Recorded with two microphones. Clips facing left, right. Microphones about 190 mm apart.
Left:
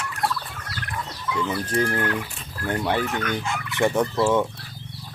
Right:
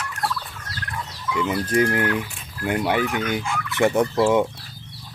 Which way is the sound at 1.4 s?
15° right (ahead or behind).